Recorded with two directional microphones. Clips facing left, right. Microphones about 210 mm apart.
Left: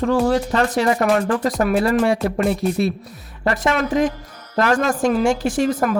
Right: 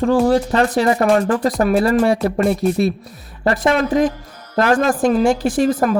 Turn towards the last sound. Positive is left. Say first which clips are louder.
# right 3 dB
turn(degrees=-35)  # may be behind; listen again after turning